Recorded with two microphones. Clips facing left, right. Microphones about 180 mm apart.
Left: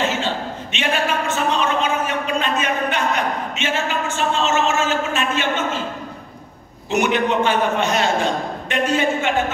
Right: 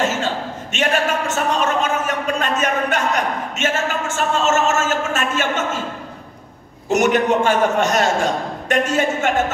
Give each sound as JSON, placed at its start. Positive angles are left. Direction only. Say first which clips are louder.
{"t": 0.0, "sound": "a sound", "louder": "right 1 dB", "side_deg": -45}
{"t": 0.7, "sound": "a man's voice", "louder": "right 2 dB", "side_deg": -45}
{"t": 6.9, "sound": "a man's voice", "louder": "right 3 dB", "side_deg": -45}